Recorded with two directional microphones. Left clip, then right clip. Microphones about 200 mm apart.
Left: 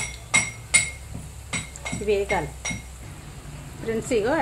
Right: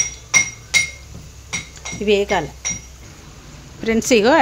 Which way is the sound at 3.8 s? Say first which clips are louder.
Right 9 dB; 55° right (ahead or behind).